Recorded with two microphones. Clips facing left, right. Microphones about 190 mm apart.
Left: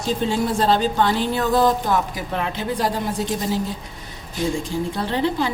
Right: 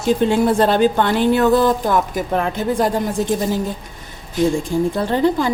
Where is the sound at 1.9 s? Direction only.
45° right (ahead or behind).